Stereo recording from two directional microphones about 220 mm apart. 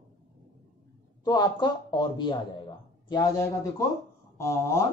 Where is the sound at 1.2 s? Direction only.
20° left (ahead or behind).